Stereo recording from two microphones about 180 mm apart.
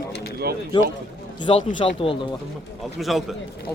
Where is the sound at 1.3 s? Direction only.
25° left (ahead or behind).